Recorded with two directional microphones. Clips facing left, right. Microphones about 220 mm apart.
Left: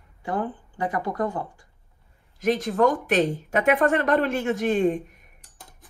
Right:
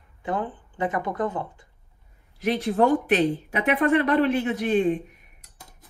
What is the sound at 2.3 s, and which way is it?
A woman's voice, 45° left (ahead or behind).